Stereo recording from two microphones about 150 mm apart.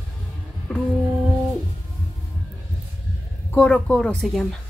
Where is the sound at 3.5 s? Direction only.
10° left (ahead or behind).